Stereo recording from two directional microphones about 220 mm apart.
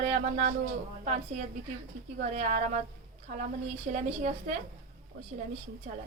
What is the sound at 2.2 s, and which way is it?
Speech, 35° right (ahead or behind).